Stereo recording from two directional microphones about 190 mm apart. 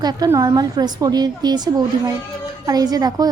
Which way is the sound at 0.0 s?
20° right (ahead or behind).